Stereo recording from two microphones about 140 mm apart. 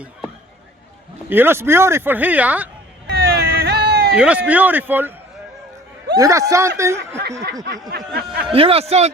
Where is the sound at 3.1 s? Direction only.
90° right.